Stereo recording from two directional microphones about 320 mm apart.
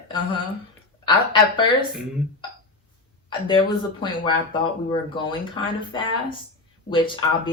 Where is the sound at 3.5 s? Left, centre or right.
Centre.